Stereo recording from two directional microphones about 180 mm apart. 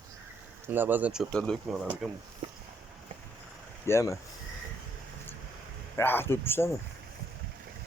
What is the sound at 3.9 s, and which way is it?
Speech, 15° left (ahead or behind).